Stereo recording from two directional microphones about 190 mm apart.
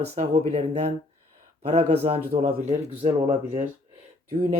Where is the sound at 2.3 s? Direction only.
50° right (ahead or behind).